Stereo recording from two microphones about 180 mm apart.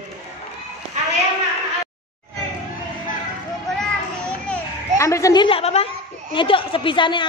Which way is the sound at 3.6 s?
5° left (ahead or behind).